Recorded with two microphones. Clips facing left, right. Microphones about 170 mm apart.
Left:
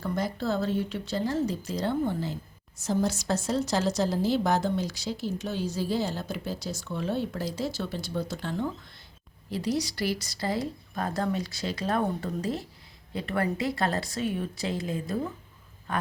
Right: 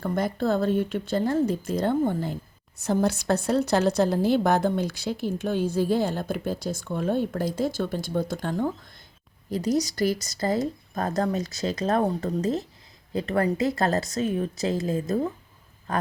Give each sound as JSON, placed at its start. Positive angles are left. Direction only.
{"t": 0.0, "sound": "speech", "side_deg": -55}